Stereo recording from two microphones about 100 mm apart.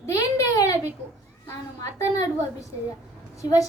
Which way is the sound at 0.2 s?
35° left (ahead or behind).